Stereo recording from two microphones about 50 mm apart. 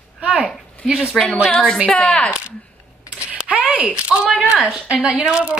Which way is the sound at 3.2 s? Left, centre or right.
Right.